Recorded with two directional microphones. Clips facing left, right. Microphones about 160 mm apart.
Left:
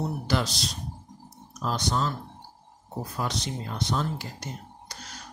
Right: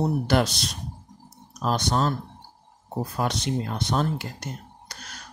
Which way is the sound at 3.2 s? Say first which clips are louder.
Right 5 dB; 60° right (ahead or behind).